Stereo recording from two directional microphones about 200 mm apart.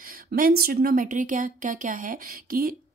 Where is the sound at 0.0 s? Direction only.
45° right (ahead or behind).